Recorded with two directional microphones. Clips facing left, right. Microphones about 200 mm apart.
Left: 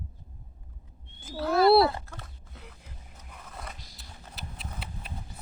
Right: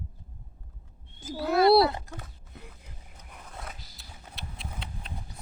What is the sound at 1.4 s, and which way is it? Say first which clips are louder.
Speech: even; 20° right (ahead or behind).